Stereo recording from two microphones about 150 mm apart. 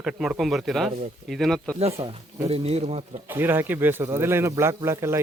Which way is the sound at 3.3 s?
15° right (ahead or behind).